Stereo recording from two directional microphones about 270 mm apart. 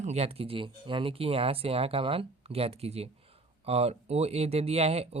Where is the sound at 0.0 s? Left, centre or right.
Right.